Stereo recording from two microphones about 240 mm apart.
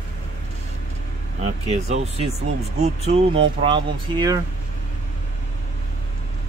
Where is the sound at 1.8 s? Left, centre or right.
Right.